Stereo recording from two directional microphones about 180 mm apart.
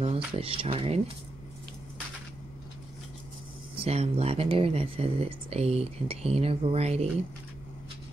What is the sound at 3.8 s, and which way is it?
Speech, 35° right (ahead or behind).